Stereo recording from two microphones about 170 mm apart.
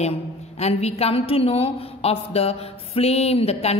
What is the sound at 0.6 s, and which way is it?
A woman's voice, 40° left (ahead or behind).